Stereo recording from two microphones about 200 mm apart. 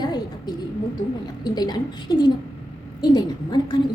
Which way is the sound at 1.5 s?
20° left (ahead or behind).